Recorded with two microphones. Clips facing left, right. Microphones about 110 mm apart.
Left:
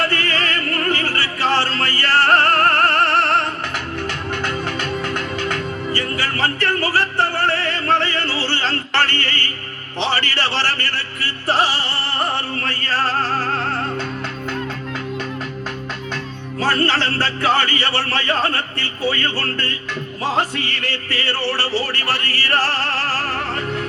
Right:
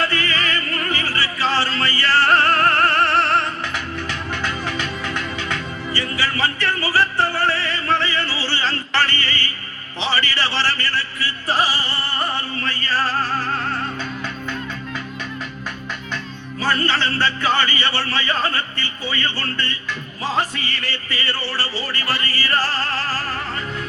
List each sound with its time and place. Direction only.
0.0 s opera: 60° left (ahead or behind)
1.8 s music: 60° left (ahead or behind)
16.6 s music: 75° left (ahead or behind)